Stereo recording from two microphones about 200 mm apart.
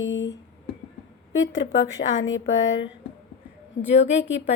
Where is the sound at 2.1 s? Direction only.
70° left (ahead or behind).